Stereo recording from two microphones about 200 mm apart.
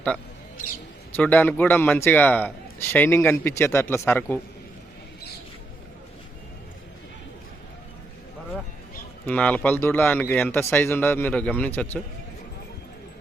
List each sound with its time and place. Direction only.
0.5 s speech: 45° left (ahead or behind)
1.1 s a man's voice: 10° left (ahead or behind)
9.2 s a man's voice: 5° left (ahead or behind)